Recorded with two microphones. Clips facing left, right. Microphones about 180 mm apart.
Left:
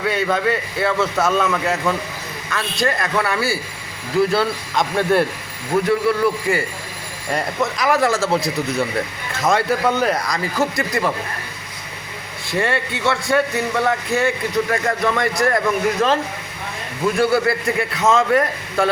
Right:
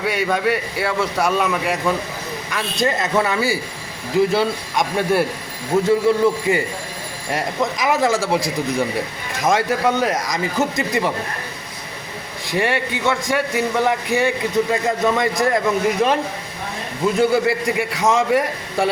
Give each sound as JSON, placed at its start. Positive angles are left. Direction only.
{"t": 0.0, "sound": "a man's voice", "side_deg": -10}
{"t": 9.4, "sound": "a man's voice", "side_deg": -15}
{"t": 12.5, "sound": "a man's voice", "side_deg": -15}
{"t": 17.2, "sound": "a man's voice", "side_deg": -15}